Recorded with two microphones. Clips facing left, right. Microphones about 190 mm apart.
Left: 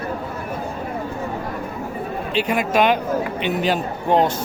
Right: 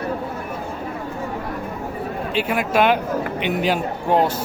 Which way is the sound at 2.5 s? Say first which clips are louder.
Even; 5° right (ahead or behind).